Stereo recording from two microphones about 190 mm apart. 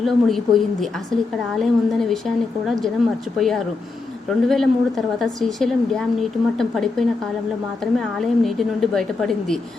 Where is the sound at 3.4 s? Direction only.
Centre (ahead or behind).